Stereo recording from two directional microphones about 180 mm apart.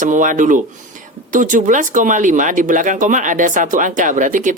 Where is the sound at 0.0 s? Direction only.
45° right (ahead or behind).